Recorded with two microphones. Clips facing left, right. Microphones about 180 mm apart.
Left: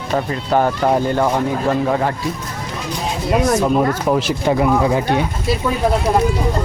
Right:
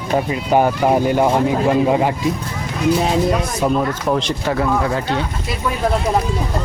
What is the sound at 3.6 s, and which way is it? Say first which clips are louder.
Speech: left 2 dB; 5° left (ahead or behind).